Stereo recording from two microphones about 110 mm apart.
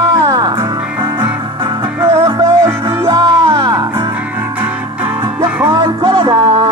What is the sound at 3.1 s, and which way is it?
Music, 45° right (ahead or behind).